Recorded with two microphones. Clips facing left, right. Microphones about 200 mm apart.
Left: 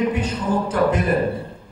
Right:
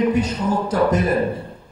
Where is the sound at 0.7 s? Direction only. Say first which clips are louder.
Right 2 dB; 40° right (ahead or behind).